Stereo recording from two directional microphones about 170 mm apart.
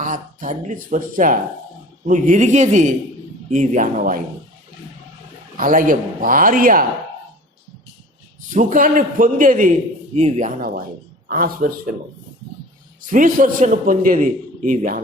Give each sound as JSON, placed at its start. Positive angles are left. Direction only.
{"t": 0.0, "sound": "a man's voice", "side_deg": -50}
{"t": 5.5, "sound": "a man's voice", "side_deg": -55}
{"t": 8.4, "sound": "a man's voice", "side_deg": -50}
{"t": 13.0, "sound": "a man's voice", "side_deg": -50}